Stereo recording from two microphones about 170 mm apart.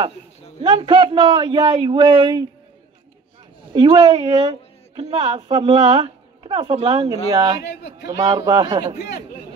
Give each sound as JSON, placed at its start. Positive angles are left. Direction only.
{"t": 0.6, "sound": "a woman's voice", "side_deg": -30}
{"t": 3.7, "sound": "a woman's voice", "side_deg": -30}
{"t": 7.6, "sound": "a man's voice", "side_deg": 80}
{"t": 8.2, "sound": "a woman's voice", "side_deg": -25}